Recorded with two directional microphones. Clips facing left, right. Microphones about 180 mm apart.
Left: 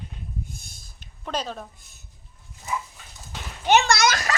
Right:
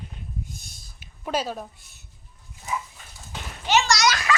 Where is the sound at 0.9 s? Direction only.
10° right (ahead or behind).